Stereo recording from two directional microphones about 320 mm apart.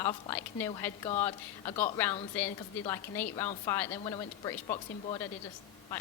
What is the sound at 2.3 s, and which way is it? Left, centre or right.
A woman's voice, centre.